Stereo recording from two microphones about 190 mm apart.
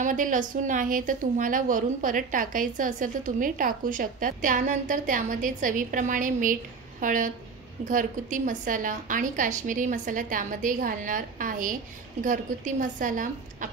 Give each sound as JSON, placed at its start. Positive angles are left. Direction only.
{"t": 0.0, "sound": "a woman's voice", "side_deg": -40}